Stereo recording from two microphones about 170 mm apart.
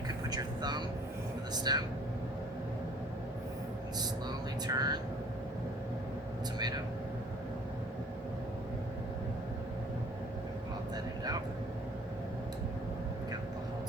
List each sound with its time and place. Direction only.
0.3 s speech: 25° right (ahead or behind)
4.6 s speech: 25° right (ahead or behind)